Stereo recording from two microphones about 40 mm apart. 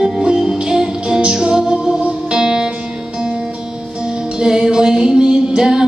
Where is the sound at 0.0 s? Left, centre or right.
Centre.